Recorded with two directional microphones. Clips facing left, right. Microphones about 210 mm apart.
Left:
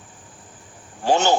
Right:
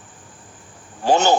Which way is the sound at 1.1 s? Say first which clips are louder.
Right 2 dB; 40° right (ahead or behind).